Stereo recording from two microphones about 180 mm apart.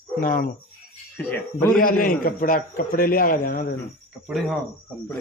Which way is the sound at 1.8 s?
50° left (ahead or behind).